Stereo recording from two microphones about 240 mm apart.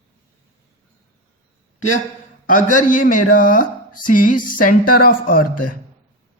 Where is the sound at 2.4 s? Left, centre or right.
Left.